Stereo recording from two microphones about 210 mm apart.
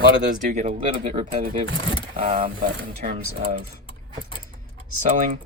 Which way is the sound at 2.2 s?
40° right (ahead or behind).